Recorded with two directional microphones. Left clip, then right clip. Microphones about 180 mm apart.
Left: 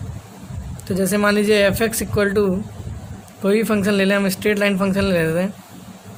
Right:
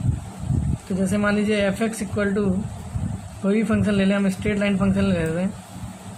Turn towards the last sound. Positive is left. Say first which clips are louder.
# left 5 dB
turn(degrees=60)  # may be behind; listen again after turning